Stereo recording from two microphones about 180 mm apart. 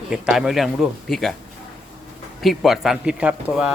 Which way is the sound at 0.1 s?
Centre (ahead or behind).